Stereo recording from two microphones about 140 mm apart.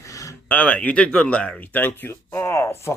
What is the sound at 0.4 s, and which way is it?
Speech, 10° left (ahead or behind).